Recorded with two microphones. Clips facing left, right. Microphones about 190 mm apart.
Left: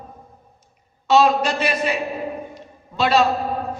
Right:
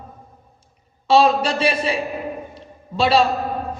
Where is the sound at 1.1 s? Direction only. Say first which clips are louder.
Right 1 dB; 30° right (ahead or behind).